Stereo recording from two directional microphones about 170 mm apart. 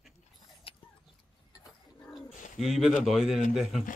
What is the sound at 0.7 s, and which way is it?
Dog, 35° left (ahead or behind).